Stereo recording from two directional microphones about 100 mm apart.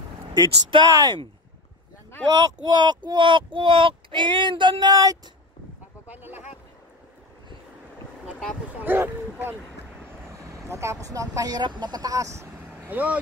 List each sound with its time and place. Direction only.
0.3 s speech: 50° right (ahead or behind)
2.4 s speech: 45° right (ahead or behind)
6.0 s vehicle: 20° right (ahead or behind)
8.8 s speech: 20° right (ahead or behind)
12.7 s speech: 15° right (ahead or behind)